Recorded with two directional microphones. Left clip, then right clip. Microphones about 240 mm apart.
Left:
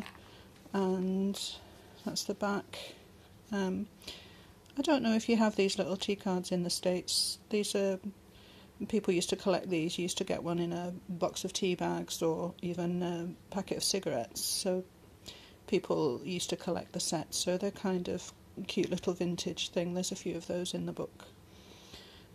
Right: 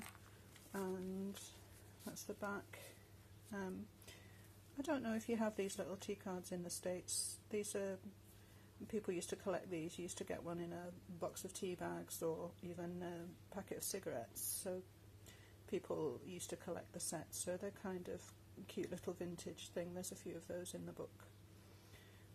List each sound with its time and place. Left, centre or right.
0.7 s a sound: left
2.0 s speech: left
4.7 s speech: left